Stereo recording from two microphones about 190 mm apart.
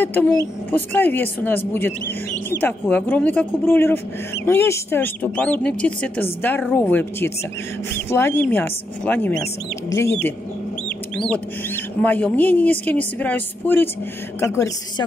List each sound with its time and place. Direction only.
0.0 s a woman's voice: 10° left (ahead or behind)
11.7 s a woman's voice: 10° left (ahead or behind)